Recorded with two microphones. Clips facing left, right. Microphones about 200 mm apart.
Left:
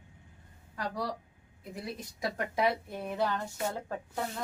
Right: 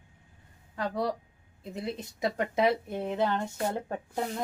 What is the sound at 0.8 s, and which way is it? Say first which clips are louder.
Speech: right 5 dB; 25° right (ahead or behind).